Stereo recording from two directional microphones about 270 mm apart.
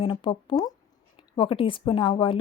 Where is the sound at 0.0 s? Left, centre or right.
Centre.